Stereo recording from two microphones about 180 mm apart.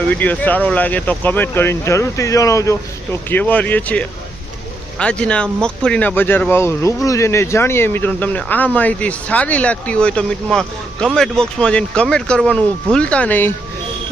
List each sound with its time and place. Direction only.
0.1 s speech: 10° left (ahead or behind)